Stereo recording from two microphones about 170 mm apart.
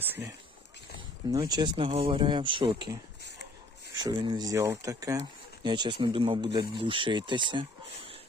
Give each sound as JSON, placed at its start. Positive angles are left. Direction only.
{"t": 0.0, "sound": "speech", "side_deg": -10}
{"t": 1.3, "sound": "speech", "side_deg": -25}
{"t": 4.0, "sound": "speech", "side_deg": -25}